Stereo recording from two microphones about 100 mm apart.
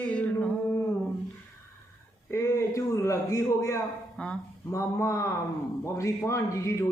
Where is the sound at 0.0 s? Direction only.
15° left (ahead or behind).